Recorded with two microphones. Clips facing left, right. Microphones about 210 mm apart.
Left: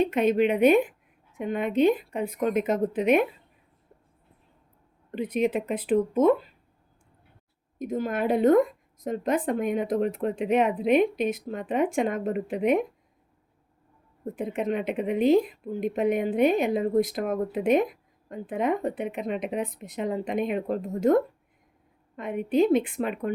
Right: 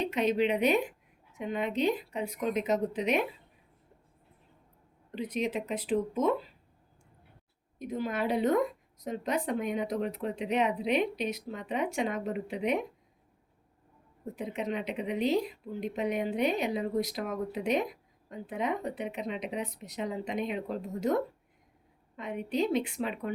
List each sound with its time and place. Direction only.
0.0 s a woman's voice: 55° left (ahead or behind)
5.1 s speech: 55° left (ahead or behind)
7.8 s a woman's voice: 45° left (ahead or behind)
14.3 s a woman's voice: 50° left (ahead or behind)